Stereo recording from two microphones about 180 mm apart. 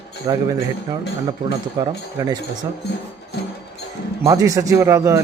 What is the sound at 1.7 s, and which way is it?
Speech, 25° right (ahead or behind).